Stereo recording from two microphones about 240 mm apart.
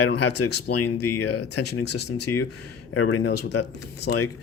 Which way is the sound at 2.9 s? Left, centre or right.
Left.